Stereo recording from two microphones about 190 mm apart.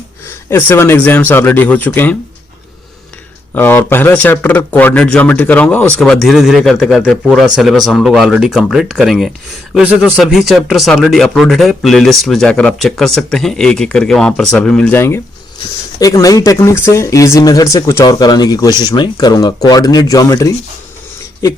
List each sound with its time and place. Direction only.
0.5 s speech: 10° left (ahead or behind)
3.5 s a man's voice: 10° left (ahead or behind)